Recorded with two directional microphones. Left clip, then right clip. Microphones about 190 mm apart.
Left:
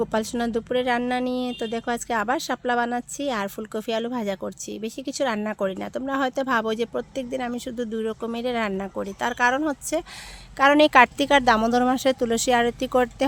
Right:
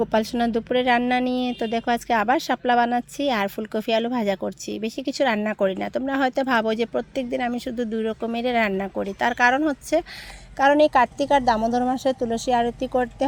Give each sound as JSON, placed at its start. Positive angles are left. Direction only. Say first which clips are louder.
{"t": 0.0, "sound": "speech", "louder": "right 3 dB", "side_deg": 0}
{"t": 10.6, "sound": "speech", "louder": "left 1 dB", "side_deg": 15}